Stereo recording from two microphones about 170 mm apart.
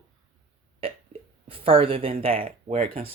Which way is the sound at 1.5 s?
30° right (ahead or behind).